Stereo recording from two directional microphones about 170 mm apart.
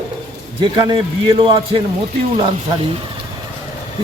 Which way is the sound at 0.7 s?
30° right (ahead or behind).